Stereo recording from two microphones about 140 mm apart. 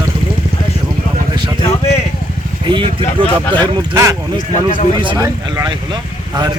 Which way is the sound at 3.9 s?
20° right (ahead or behind).